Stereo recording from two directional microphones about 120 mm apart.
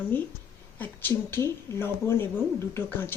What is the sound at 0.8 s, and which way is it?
Speech, 15° left (ahead or behind).